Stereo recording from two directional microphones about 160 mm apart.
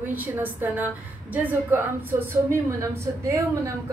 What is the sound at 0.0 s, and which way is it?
A woman's voice, 10° right (ahead or behind).